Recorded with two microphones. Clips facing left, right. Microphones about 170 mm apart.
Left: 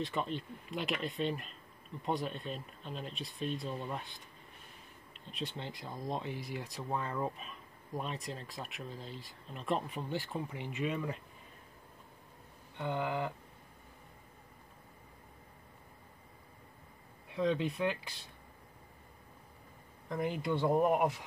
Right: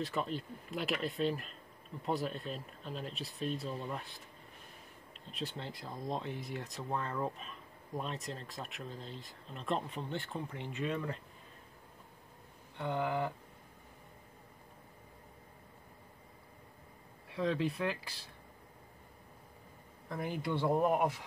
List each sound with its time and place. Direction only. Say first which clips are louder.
0.0 s speech: even; centre (ahead or behind)
5.3 s speech: even; centre (ahead or behind)
12.7 s speech: right 1 dB; centre (ahead or behind)
17.3 s speech: left 1 dB; centre (ahead or behind)
20.1 s speech: left 3 dB; 5° right (ahead or behind)